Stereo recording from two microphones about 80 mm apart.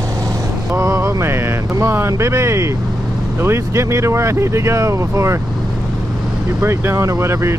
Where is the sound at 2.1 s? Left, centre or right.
Right.